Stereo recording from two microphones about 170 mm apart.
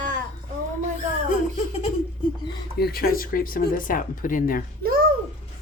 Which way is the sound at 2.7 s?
65° left (ahead or behind).